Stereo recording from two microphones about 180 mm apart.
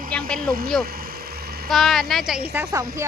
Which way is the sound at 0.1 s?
5° left (ahead or behind).